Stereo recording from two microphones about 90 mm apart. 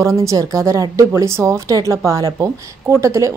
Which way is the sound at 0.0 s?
35° right (ahead or behind).